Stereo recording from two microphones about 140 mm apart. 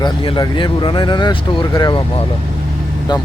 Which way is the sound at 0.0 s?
30° left (ahead or behind).